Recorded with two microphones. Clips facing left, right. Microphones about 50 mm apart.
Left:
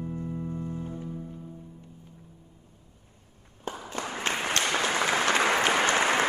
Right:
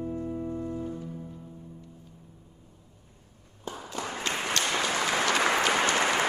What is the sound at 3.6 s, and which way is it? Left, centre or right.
Applause, left.